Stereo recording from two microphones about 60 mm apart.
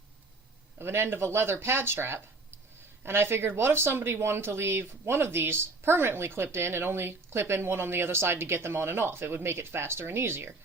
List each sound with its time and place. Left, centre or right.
0.8 s speech: right